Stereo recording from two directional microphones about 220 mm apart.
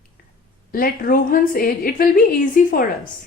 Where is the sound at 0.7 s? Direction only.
40° left (ahead or behind).